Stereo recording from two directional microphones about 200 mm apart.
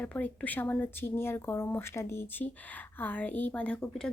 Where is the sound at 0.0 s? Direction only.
10° left (ahead or behind).